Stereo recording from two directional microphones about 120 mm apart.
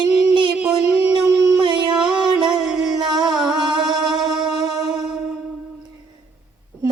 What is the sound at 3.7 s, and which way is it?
Music, 35° right (ahead or behind).